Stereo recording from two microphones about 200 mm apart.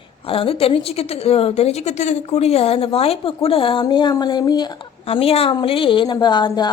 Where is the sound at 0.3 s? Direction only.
30° left (ahead or behind).